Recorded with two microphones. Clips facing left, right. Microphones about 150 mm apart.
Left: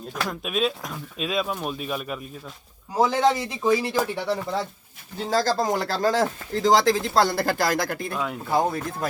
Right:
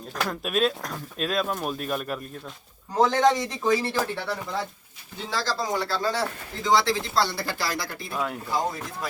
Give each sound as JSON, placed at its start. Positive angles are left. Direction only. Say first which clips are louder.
{"t": 0.2, "sound": "speech", "louder": "right 1 dB", "side_deg": 0}
{"t": 5.1, "sound": "speech", "louder": "left 6 dB", "side_deg": 40}
{"t": 8.1, "sound": "speech", "louder": "left 1 dB", "side_deg": 0}
{"t": 8.4, "sound": "speech", "louder": "left 5 dB", "side_deg": 55}